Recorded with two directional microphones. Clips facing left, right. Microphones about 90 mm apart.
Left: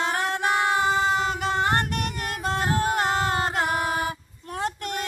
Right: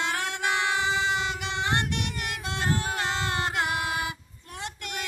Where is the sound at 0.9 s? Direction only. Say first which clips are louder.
Left 4 dB; 45° left (ahead or behind).